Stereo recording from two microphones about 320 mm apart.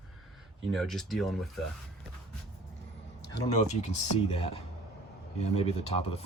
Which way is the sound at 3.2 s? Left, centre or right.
Left.